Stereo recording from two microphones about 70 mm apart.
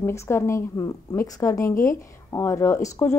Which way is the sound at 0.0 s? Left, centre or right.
Left.